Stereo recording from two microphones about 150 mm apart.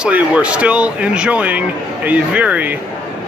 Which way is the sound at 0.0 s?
5° right (ahead or behind).